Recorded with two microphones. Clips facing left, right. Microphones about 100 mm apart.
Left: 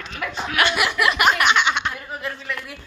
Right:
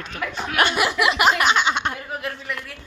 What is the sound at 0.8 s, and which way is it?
Speech, 25° right (ahead or behind).